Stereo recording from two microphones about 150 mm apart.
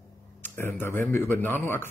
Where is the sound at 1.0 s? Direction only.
15° left (ahead or behind).